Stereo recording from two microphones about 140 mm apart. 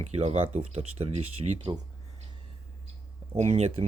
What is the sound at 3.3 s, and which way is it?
Speech, 50° right (ahead or behind).